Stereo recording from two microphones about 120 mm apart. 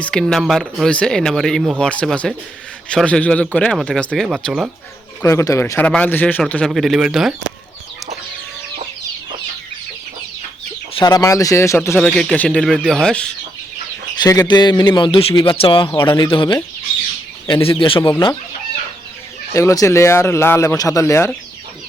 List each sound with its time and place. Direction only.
0.0 s speech: 5° left (ahead or behind)
5.2 s speech: 25° left (ahead or behind); by 7.3 s 5° right (ahead or behind)
11.0 s speech: 30° left (ahead or behind)
11.9 s speech: 5° left (ahead or behind)
14.2 s speech: 25° left (ahead or behind)
14.4 s speech: 40° left (ahead or behind)
19.5 s speech: 25° left (ahead or behind)